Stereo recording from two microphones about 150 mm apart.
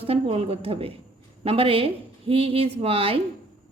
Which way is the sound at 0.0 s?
40° right (ahead or behind).